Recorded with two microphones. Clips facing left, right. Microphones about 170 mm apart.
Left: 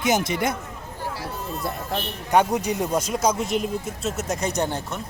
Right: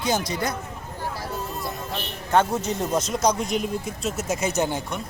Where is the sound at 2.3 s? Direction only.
15° left (ahead or behind).